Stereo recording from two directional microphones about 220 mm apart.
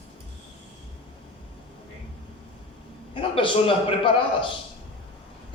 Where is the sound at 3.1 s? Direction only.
20° left (ahead or behind).